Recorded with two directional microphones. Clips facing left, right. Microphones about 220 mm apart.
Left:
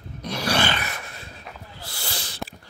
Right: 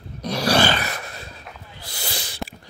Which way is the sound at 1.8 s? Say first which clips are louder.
Right 3 dB; 15° right (ahead or behind).